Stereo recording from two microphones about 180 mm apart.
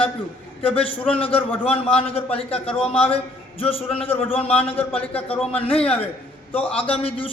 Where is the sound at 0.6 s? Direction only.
30° left (ahead or behind).